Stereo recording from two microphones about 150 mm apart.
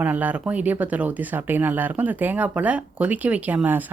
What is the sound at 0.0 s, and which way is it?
Speech, 10° right (ahead or behind).